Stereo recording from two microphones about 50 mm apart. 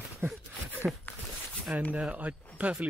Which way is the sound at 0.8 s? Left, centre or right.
Right.